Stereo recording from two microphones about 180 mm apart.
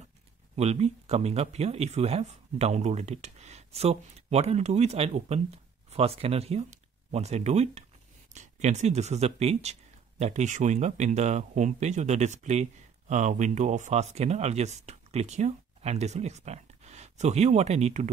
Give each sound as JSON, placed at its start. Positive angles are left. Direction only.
{"t": 0.6, "sound": "speech", "side_deg": -35}